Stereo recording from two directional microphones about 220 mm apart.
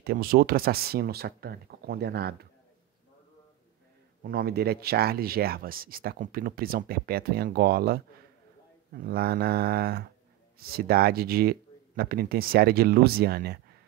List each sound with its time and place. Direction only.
0.0 s speech: 40° right (ahead or behind)
4.2 s speech: 45° right (ahead or behind)